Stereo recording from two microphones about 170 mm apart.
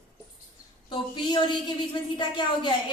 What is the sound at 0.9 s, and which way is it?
A woman's voice, 25° left (ahead or behind).